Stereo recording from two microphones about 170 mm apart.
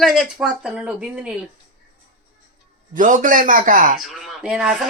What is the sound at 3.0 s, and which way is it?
Speech, 50° right (ahead or behind).